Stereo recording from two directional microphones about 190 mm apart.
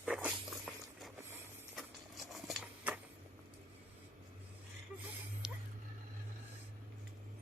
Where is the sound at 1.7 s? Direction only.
Centre (ahead or behind).